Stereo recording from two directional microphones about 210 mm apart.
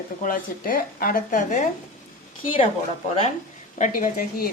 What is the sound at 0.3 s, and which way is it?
A woman's voice, 45° left (ahead or behind).